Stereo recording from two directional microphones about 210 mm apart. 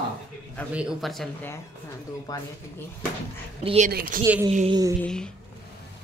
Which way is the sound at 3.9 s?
45° right (ahead or behind).